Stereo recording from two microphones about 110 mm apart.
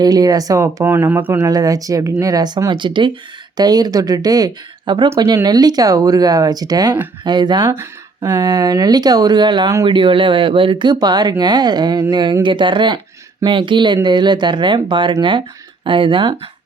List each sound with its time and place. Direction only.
0.0 s speech: 35° right (ahead or behind)
0.9 s speech: 20° right (ahead or behind)
1.4 s speech: 35° right (ahead or behind)
7.7 s speech: 25° right (ahead or behind)
8.4 s speech: 40° right (ahead or behind)